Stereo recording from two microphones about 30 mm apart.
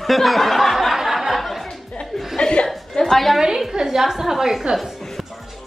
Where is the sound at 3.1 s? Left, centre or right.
Centre.